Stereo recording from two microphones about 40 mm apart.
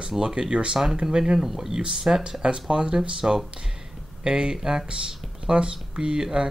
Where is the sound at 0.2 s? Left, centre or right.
Right.